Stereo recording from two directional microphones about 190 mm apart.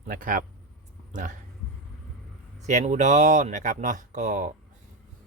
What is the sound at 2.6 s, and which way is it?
Speech, 40° right (ahead or behind).